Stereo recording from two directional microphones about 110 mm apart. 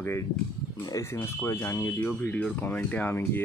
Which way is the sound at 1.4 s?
20° left (ahead or behind).